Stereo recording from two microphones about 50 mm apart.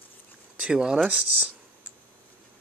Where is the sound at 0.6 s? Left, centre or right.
Centre.